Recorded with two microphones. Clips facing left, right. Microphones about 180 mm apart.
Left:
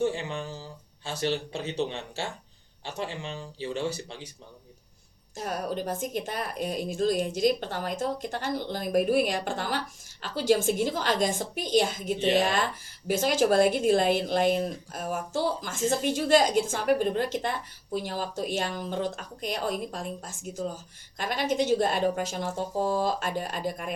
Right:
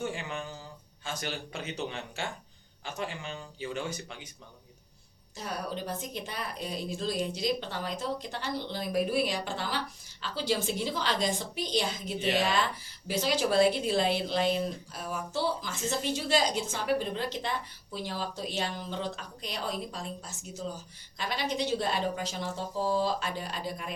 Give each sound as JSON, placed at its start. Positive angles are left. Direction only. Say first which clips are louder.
{"t": 0.0, "sound": "speech", "louder": "left 6 dB", "side_deg": 30}
{"t": 5.4, "sound": "a woman's voice", "louder": "left 5 dB", "side_deg": 50}